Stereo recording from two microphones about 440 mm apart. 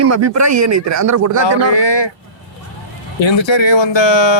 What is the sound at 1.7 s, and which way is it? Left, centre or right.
Speech, left.